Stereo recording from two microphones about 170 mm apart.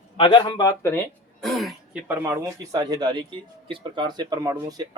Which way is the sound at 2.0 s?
10° right (ahead or behind).